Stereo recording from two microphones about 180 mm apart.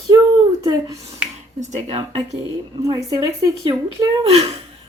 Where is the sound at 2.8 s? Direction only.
20° right (ahead or behind).